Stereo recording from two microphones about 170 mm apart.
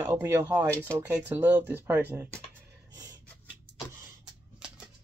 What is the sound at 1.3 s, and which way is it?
Speech, 10° right (ahead or behind).